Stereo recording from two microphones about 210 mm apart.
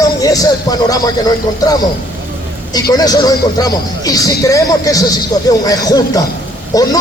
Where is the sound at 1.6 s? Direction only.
20° left (ahead or behind).